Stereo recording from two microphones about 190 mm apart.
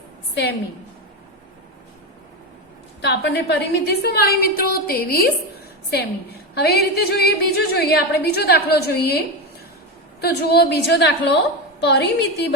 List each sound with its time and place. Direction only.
3.0 s a woman's voice: 65° left (ahead or behind)